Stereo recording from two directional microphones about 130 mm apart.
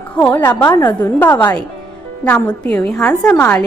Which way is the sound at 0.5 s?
15° left (ahead or behind).